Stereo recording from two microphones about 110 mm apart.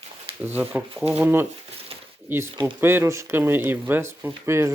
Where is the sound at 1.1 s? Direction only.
15° right (ahead or behind).